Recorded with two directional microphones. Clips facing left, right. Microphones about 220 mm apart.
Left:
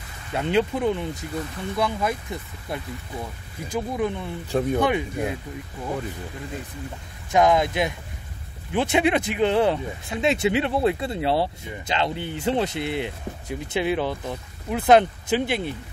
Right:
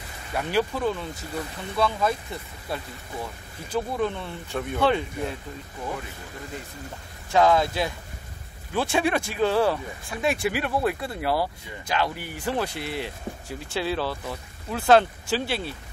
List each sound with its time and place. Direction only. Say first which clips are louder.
0.3 s speech: left 3 dB; 20° left (ahead or behind)
4.5 s speech: left 8 dB; 35° left (ahead or behind)
4.7 s speech: left 1 dB; 15° left (ahead or behind)
7.2 s speech: left 1 dB; 15° left (ahead or behind)